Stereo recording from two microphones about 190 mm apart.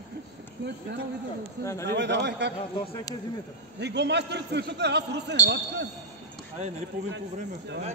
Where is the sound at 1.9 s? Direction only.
65° right (ahead or behind).